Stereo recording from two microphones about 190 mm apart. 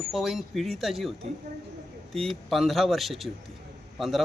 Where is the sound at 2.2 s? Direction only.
Centre (ahead or behind).